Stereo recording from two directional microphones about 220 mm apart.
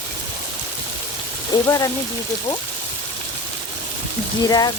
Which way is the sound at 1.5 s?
20° left (ahead or behind).